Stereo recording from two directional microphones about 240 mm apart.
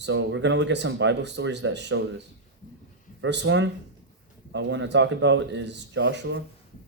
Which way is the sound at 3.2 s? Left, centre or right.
Right.